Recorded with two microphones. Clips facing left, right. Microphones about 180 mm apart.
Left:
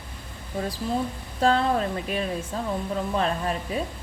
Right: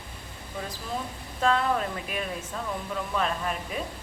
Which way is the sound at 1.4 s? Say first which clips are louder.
Left 3 dB; 30° left (ahead or behind).